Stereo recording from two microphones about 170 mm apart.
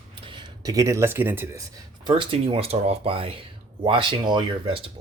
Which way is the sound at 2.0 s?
30° right (ahead or behind).